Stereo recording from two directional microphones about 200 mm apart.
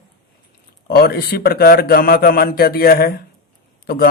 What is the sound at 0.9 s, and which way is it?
A man's voice, 50° left (ahead or behind).